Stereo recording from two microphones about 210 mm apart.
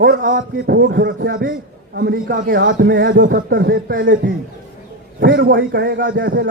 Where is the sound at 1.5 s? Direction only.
50° right (ahead or behind).